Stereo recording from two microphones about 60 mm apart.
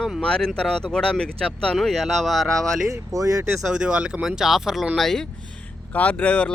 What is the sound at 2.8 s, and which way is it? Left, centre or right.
Speech, right.